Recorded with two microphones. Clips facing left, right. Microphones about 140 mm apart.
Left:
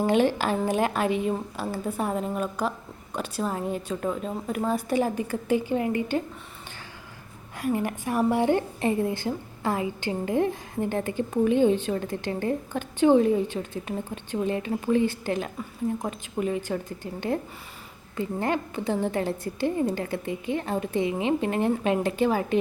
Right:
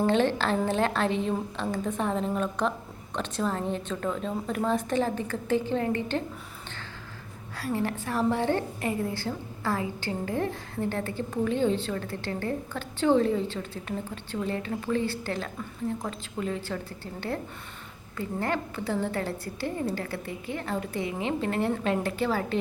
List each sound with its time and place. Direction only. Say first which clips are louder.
0.0 s a woman's voice: left 2 dB; 10° left (ahead or behind)
7.5 s a woman's voice: left 3 dB; 15° left (ahead or behind)